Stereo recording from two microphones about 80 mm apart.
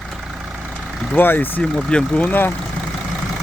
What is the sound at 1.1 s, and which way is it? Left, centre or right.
Speech, left.